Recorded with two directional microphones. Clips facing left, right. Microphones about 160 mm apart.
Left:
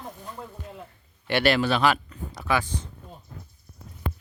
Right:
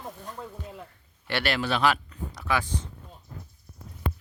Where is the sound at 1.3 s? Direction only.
20° left (ahead or behind).